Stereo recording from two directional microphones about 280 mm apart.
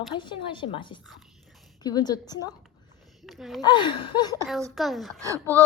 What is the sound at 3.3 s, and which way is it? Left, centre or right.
Speech, centre.